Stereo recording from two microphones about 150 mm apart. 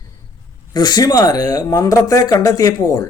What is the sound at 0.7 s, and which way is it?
Speech, 30° left (ahead or behind).